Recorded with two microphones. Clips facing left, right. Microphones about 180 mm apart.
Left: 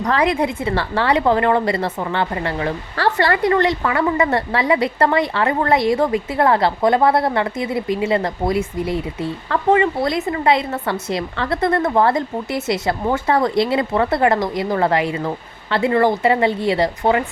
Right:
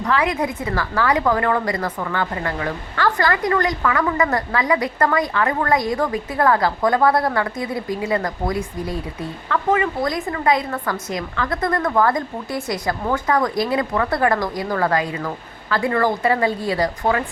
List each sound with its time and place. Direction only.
0.0 s a woman's voice: 35° left (ahead or behind)